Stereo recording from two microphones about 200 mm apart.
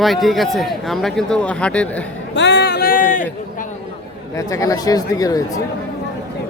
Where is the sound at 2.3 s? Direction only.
60° left (ahead or behind); by 3.2 s 45° left (ahead or behind).